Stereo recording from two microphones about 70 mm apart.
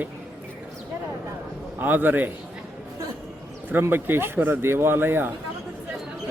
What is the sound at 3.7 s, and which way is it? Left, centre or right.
Speech, right.